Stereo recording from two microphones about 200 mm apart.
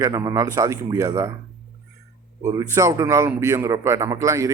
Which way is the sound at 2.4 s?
15° right (ahead or behind).